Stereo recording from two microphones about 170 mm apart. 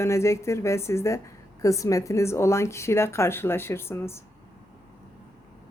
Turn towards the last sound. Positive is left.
turn(degrees=15)  # may be behind; listen again after turning